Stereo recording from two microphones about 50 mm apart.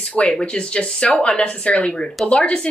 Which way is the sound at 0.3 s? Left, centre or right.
Centre.